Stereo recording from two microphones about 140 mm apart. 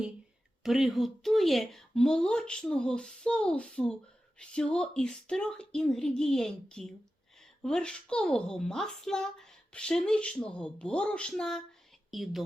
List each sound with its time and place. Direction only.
0.6 s a woman's voice: 5° right (ahead or behind)